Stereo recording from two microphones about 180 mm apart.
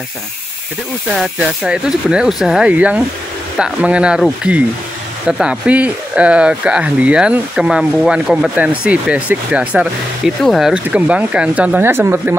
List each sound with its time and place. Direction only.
1.1 s speech: 5° right (ahead or behind)